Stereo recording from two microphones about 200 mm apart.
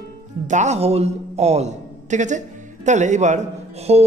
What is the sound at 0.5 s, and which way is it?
A man's voice, 35° right (ahead or behind).